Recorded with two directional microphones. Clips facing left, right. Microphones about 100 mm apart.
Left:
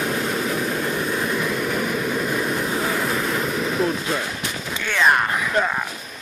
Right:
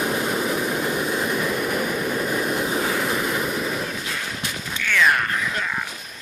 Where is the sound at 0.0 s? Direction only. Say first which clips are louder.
Even; 10° right (ahead or behind).